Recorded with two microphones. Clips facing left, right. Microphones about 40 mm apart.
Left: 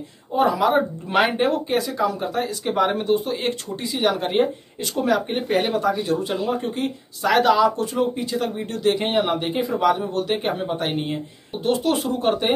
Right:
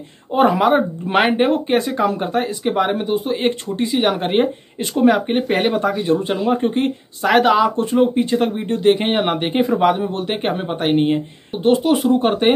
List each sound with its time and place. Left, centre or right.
0.3 s speech: right
2.6 s speech: centre
3.4 s speech: right
9.1 s speech: right; by 12.1 s centre
12.1 s speech: right